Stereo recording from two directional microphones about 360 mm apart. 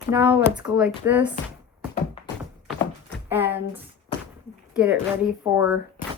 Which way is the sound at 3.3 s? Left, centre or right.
Centre.